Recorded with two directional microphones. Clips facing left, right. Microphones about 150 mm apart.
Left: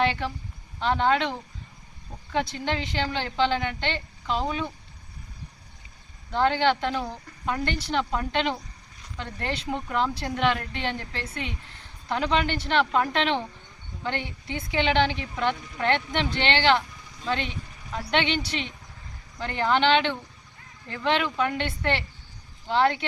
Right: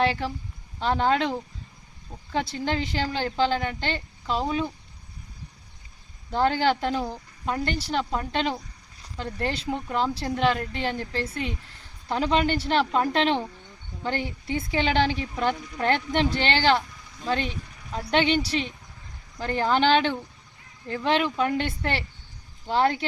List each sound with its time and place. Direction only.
0.0 s a woman's voice: 35° right (ahead or behind)
2.3 s a woman's voice: 35° right (ahead or behind)
6.3 s a woman's voice: 35° right (ahead or behind)